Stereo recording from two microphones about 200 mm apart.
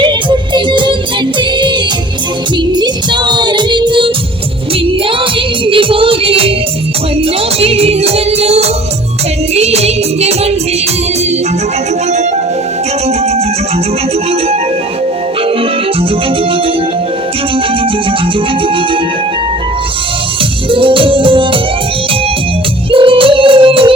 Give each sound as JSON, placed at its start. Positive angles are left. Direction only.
{"t": 0.0, "sound": "music", "side_deg": -25}
{"t": 2.7, "sound": "music", "side_deg": -20}
{"t": 5.6, "sound": "music", "side_deg": -25}
{"t": 7.6, "sound": "music", "side_deg": -30}
{"t": 20.7, "sound": "music", "side_deg": -25}
{"t": 22.9, "sound": "music", "side_deg": -25}